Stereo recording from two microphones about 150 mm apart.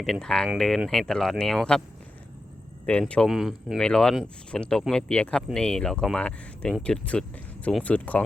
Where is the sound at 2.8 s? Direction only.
5° left (ahead or behind).